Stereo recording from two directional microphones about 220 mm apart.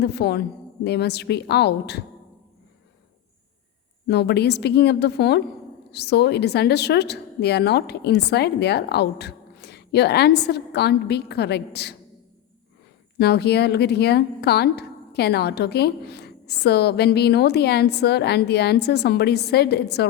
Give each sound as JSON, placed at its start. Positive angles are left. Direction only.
{"t": 0.0, "sound": "speech", "side_deg": 50}
{"t": 4.0, "sound": "speech", "side_deg": 50}
{"t": 13.1, "sound": "speech", "side_deg": 50}